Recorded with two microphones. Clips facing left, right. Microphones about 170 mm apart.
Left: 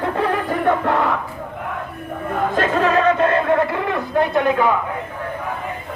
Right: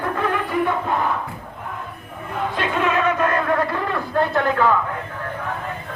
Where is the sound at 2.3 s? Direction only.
45° left (ahead or behind); by 4.8 s 15° left (ahead or behind).